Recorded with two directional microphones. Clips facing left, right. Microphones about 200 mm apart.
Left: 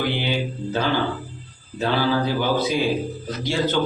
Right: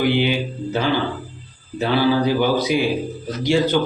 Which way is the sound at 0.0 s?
15° right (ahead or behind).